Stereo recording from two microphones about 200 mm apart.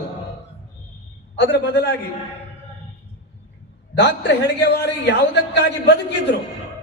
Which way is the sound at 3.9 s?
60° left (ahead or behind).